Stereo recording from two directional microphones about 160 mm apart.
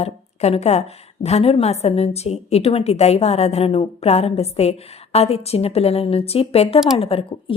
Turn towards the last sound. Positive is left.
turn(degrees=35)  # may be behind; listen again after turning